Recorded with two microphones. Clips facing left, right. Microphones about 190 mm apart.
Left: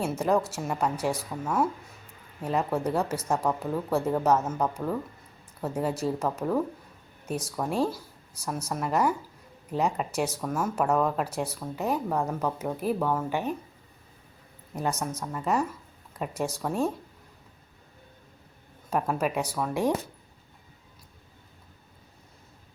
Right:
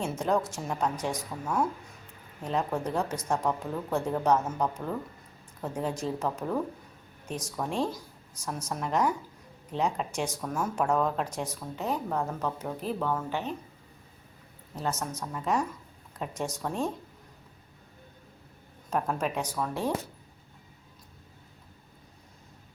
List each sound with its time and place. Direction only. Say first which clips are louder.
0.0 s speech: left 3 dB; 5° left (ahead or behind)
14.8 s speech: left 3 dB; 10° left (ahead or behind)
18.9 s speech: left 2 dB; 5° left (ahead or behind)